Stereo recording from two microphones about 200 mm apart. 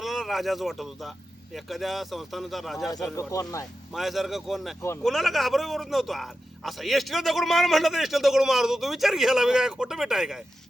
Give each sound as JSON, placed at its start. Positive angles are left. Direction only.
{"t": 0.0, "sound": "a man's voice", "side_deg": 0}
{"t": 3.2, "sound": "speech", "side_deg": 15}
{"t": 3.9, "sound": "a man's voice", "side_deg": 0}